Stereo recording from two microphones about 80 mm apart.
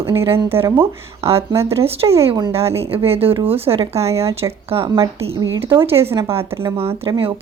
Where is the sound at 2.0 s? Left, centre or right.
Right.